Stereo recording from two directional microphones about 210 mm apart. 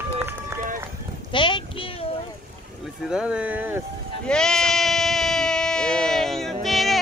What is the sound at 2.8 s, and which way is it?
Speech, centre (ahead or behind).